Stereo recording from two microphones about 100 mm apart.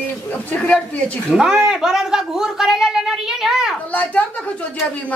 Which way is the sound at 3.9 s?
15° left (ahead or behind).